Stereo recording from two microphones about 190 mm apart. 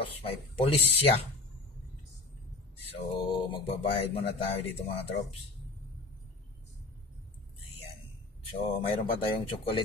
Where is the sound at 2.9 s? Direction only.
25° left (ahead or behind).